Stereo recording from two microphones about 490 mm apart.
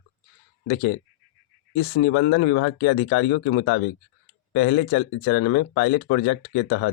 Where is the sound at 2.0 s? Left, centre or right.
Left.